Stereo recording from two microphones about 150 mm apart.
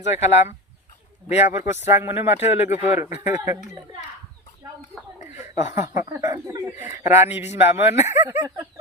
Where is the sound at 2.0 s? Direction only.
15° right (ahead or behind).